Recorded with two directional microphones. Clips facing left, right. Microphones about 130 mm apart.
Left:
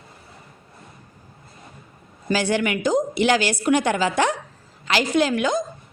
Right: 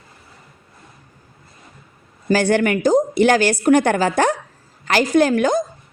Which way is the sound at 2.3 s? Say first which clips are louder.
Right 5 dB; 50° right (ahead or behind).